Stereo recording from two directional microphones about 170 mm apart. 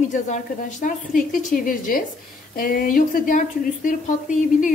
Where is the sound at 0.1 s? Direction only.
45° left (ahead or behind).